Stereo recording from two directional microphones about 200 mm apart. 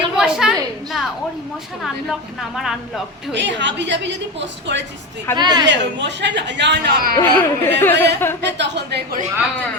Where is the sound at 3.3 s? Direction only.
65° right (ahead or behind).